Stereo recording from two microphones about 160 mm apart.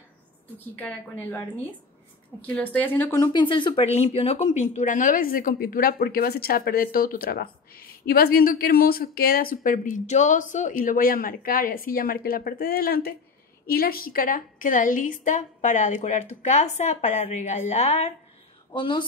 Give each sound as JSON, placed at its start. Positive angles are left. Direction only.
{"t": 0.7, "sound": "speech", "side_deg": 10}
{"t": 2.4, "sound": "speech", "side_deg": 10}
{"t": 3.3, "sound": "a woman's voice", "side_deg": 30}
{"t": 18.7, "sound": "speech", "side_deg": 30}